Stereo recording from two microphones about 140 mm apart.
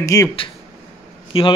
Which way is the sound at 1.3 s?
40° left (ahead or behind).